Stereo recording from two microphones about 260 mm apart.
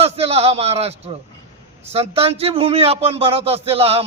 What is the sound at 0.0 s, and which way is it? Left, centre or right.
A man's voice, right.